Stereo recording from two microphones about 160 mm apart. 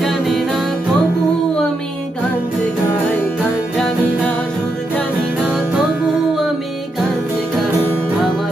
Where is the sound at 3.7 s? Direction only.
5° left (ahead or behind).